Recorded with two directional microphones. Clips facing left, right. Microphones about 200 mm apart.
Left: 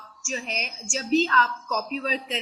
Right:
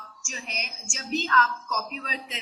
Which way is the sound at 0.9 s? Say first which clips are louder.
Left 6 dB; 35° left (ahead or behind).